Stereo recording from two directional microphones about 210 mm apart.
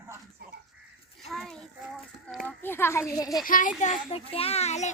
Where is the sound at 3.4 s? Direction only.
40° left (ahead or behind).